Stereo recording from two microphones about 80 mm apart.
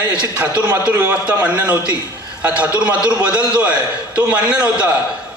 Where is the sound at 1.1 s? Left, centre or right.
Centre.